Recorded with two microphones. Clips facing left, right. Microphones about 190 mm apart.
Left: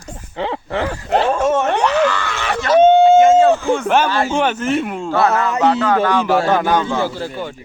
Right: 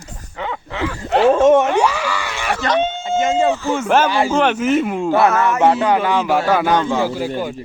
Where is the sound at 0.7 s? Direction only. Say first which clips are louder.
Left 2 dB; 50° left (ahead or behind).